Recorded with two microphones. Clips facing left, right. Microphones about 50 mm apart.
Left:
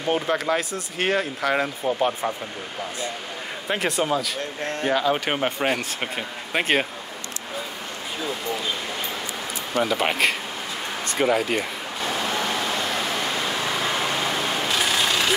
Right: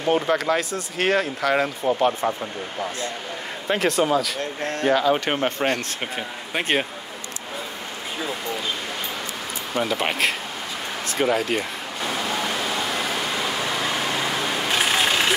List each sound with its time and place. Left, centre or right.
0.1 s speech: centre
1.9 s speech: centre
3.6 s speech: centre
9.8 s speech: centre
14.7 s vehicle: centre